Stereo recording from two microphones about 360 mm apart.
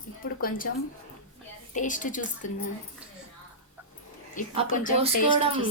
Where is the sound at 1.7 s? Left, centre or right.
Left.